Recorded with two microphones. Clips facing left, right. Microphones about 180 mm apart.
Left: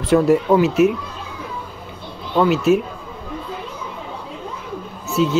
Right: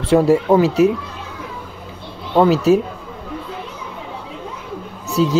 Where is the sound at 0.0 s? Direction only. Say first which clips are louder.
Right 1 dB; 30° right (ahead or behind).